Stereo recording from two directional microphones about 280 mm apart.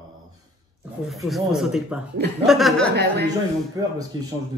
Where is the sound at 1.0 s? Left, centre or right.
Centre.